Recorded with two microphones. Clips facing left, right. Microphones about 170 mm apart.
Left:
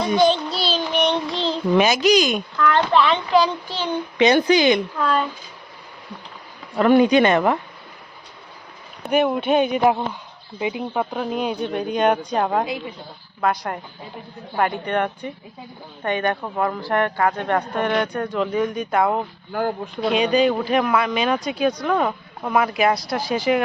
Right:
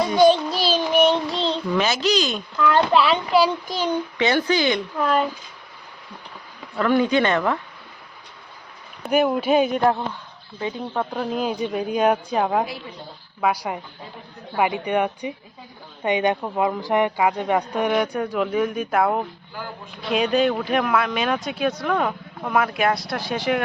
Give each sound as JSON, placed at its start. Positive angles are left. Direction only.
{"t": 0.0, "sound": "child singing", "side_deg": -10}
{"t": 1.7, "sound": "speech", "side_deg": 15}
{"t": 2.6, "sound": "speech", "side_deg": -10}
{"t": 4.2, "sound": "speech", "side_deg": 20}
{"t": 4.9, "sound": "speech", "side_deg": -15}
{"t": 6.7, "sound": "speech", "side_deg": 20}
{"t": 9.0, "sound": "speech", "side_deg": 0}
{"t": 9.8, "sound": "speech", "side_deg": 10}
{"t": 19.5, "sound": "speech", "side_deg": 55}
{"t": 20.1, "sound": "speech", "side_deg": 0}